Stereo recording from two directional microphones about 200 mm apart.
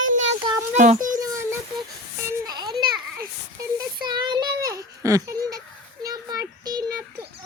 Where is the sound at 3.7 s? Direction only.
20° right (ahead or behind).